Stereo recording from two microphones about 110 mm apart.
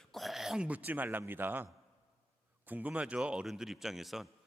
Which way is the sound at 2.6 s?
15° right (ahead or behind).